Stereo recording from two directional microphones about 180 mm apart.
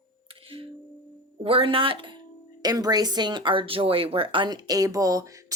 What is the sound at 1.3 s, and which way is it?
Speech, 30° right (ahead or behind).